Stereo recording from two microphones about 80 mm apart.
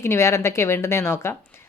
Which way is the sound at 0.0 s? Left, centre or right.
Left.